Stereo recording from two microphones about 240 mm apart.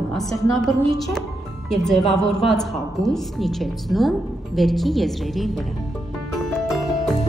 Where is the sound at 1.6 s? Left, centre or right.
Centre.